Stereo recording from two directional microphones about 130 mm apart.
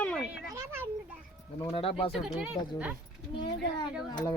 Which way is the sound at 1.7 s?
45° left (ahead or behind).